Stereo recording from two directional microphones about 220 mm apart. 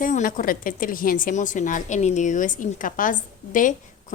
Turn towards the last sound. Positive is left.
turn(degrees=35)  # may be behind; listen again after turning